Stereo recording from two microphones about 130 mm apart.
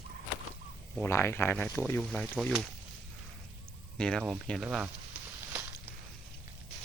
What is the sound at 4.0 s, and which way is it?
Speech, 5° left (ahead or behind).